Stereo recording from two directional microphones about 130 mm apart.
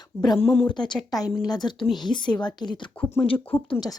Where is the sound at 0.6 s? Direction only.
35° left (ahead or behind).